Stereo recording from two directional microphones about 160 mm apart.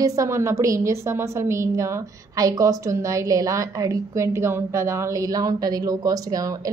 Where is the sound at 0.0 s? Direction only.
20° right (ahead or behind).